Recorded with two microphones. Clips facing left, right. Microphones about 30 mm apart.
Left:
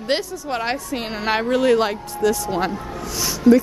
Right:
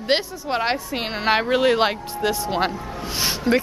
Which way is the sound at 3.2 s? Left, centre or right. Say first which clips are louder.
Left 6 dB; right.